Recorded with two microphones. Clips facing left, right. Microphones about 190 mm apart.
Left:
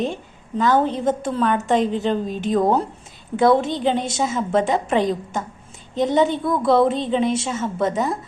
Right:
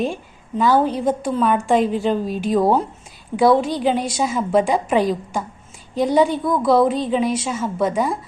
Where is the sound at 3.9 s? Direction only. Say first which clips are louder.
Right 1 dB; 25° left (ahead or behind).